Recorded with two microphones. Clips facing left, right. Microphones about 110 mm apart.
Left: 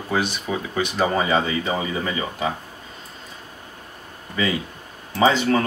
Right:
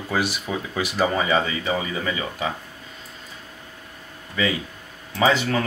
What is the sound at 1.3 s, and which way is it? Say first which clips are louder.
Speech: left 1 dB; 30° left (ahead or behind).